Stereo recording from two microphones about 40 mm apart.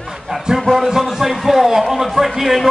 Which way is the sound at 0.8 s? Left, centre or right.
Centre.